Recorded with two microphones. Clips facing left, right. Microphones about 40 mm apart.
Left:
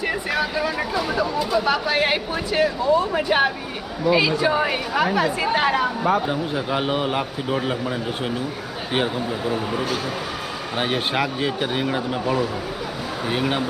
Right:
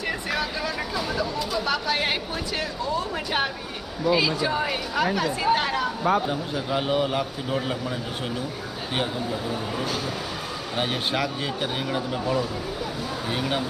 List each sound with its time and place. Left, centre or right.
0.0 s a woman's voice: centre